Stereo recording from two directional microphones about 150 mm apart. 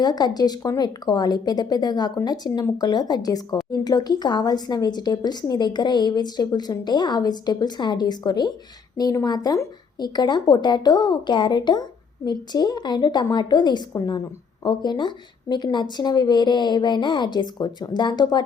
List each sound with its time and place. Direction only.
0.0 s a woman's voice: 30° left (ahead or behind)